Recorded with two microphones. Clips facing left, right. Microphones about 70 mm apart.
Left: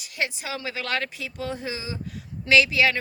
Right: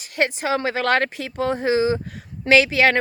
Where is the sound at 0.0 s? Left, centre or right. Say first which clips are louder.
Right 8 dB; right.